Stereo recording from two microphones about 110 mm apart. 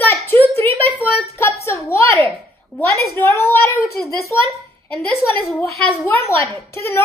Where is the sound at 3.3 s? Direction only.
25° left (ahead or behind).